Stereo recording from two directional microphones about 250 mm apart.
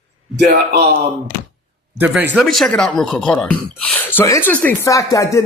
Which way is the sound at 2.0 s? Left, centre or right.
Centre.